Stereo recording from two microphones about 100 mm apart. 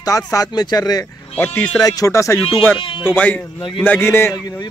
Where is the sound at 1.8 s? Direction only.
35° left (ahead or behind).